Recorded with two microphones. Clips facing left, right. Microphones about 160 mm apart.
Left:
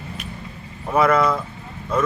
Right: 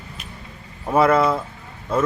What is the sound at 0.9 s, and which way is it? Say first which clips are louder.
Speech: right 1 dB; 30° right (ahead or behind).